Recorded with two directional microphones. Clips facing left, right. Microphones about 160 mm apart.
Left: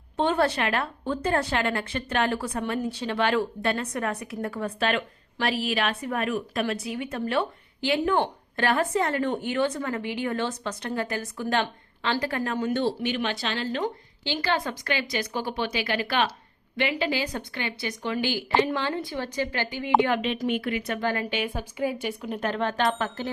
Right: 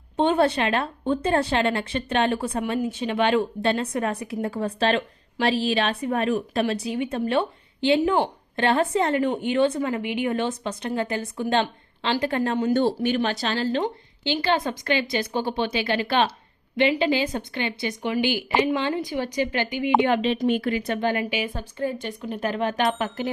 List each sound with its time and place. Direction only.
0.2 s a woman's voice: 20° right (ahead or behind)
12.7 s speech: 45° right (ahead or behind)
13.8 s a woman's voice: 20° right (ahead or behind)
21.2 s a woman's voice: 5° right (ahead or behind)
22.8 s a woman's voice: 20° right (ahead or behind)